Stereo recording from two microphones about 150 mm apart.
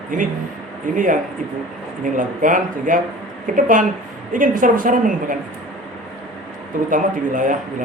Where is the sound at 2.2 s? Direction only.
60° right (ahead or behind).